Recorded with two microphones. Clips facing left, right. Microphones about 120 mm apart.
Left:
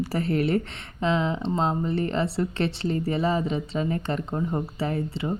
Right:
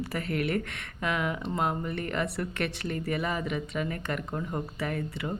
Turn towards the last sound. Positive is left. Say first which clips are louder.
# left 5 dB
turn(degrees=25)  # may be behind; listen again after turning